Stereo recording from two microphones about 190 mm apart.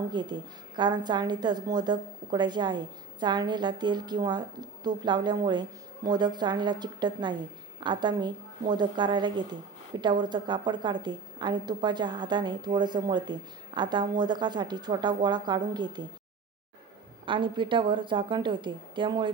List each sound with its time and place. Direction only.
0.1 s a woman's voice: 25° right (ahead or behind)
17.2 s a woman's voice: 25° right (ahead or behind)